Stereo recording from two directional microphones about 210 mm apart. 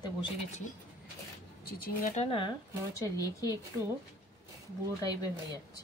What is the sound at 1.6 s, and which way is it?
Speech, 45° left (ahead or behind).